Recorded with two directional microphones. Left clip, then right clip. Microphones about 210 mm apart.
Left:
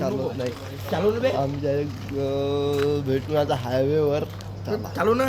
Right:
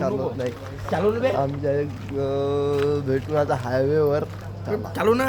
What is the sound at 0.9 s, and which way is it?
Speech, 15° right (ahead or behind).